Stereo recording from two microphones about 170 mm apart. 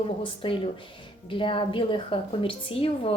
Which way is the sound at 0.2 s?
30° left (ahead or behind).